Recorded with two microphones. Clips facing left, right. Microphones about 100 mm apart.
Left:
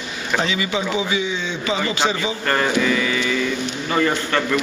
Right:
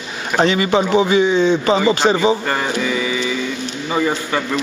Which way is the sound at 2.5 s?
10° right (ahead or behind).